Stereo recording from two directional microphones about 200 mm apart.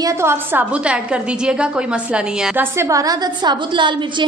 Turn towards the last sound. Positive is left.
turn(degrees=-20)  # may be behind; listen again after turning